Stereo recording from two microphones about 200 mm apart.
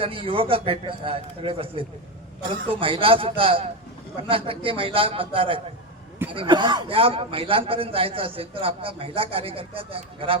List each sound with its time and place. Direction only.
0.0 s speech: 25° right (ahead or behind)